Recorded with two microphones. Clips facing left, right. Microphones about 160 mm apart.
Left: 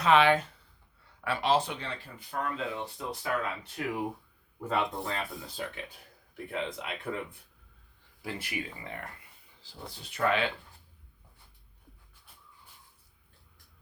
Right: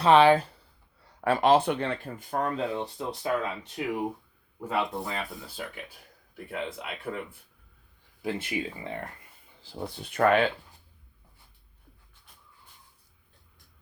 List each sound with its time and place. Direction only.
0.0 s speech: 35° right (ahead or behind)
3.2 s speech: 20° right (ahead or behind)
4.7 s speech: 5° right (ahead or behind)
8.2 s speech: 25° right (ahead or behind)
9.8 s speech: 55° right (ahead or behind)